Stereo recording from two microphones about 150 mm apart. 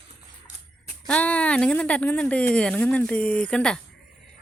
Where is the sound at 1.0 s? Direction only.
10° left (ahead or behind).